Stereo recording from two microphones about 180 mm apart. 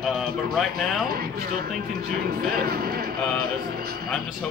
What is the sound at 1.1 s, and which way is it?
Speech, 55° right (ahead or behind).